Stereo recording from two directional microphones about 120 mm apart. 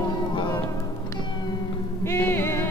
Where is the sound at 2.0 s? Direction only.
20° left (ahead or behind).